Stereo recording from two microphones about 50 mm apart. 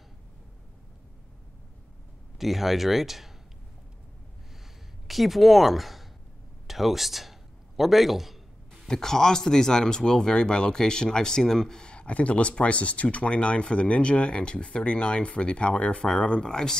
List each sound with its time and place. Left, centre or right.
2.3 s speech: centre
5.0 s a man's voice: centre
8.8 s speech: centre
11.9 s speech: left